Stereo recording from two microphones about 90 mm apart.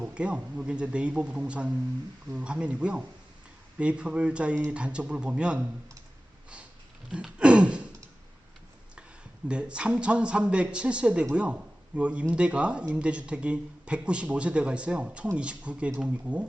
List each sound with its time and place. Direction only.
0.0 s speech: 15° right (ahead or behind)
7.1 s a sound: 10° right (ahead or behind)
9.5 s speech: 10° right (ahead or behind)